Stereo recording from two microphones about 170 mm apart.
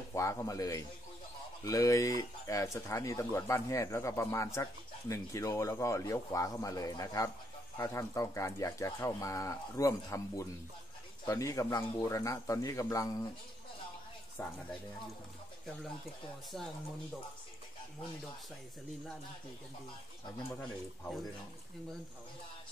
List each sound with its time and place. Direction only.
0.1 s a man's voice: 20° left (ahead or behind)
16.5 s speech: centre (ahead or behind)